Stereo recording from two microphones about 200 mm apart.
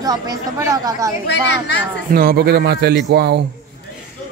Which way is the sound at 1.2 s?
60° left (ahead or behind).